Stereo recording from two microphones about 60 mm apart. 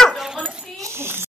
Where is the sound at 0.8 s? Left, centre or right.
Right.